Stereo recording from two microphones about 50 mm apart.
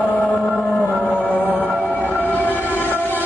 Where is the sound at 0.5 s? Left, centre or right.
Centre.